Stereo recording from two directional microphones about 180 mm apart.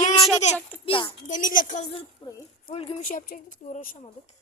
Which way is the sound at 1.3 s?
45° left (ahead or behind).